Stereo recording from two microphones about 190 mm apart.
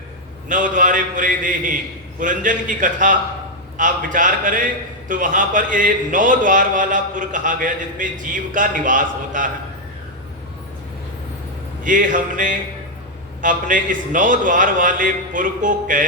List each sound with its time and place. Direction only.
0.4 s a man's voice: 45° right (ahead or behind)
11.8 s a man's voice: 45° right (ahead or behind)